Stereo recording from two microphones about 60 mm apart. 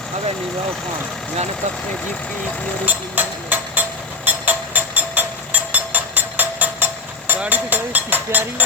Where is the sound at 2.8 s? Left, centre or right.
Right.